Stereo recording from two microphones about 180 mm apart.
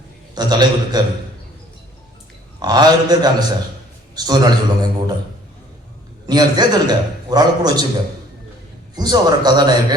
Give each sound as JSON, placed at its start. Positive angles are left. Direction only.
{"t": 0.3, "sound": "a man's voice", "side_deg": -20}
{"t": 2.6, "sound": "a man's voice", "side_deg": -20}
{"t": 6.2, "sound": "a man's voice", "side_deg": -20}
{"t": 9.0, "sound": "a man's voice", "side_deg": -20}